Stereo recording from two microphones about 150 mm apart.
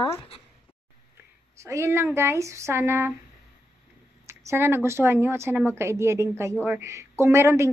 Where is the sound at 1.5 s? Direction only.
20° right (ahead or behind).